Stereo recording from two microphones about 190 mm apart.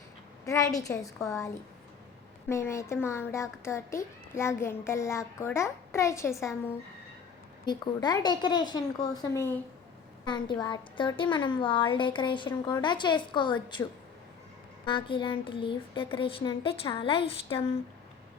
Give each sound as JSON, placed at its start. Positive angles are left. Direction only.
{"t": 0.4, "sound": "a woman's voice", "side_deg": 15}
{"t": 2.5, "sound": "a woman's voice", "side_deg": 15}
{"t": 14.8, "sound": "speech", "side_deg": 25}